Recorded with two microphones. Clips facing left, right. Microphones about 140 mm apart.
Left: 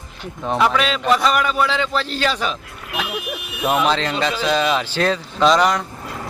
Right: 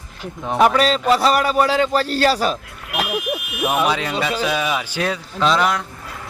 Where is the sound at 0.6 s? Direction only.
40° right (ahead or behind).